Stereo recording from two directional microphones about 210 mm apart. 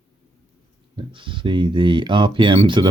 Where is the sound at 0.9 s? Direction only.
25° right (ahead or behind).